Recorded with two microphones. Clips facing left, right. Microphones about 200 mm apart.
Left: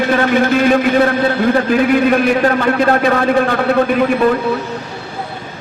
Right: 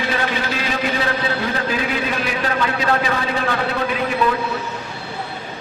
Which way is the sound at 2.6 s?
55° left (ahead or behind).